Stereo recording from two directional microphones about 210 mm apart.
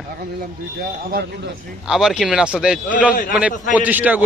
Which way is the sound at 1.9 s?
Centre (ahead or behind).